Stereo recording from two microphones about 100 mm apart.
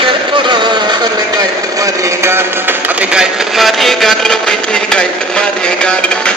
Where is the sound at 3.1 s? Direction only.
5° right (ahead or behind).